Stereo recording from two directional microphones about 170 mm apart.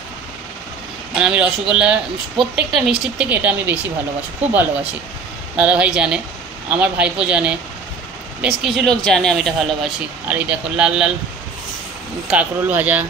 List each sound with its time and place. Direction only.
1.1 s speech: 5° right (ahead or behind)
5.6 s speech: 5° right (ahead or behind)
12.3 s speech: 10° right (ahead or behind)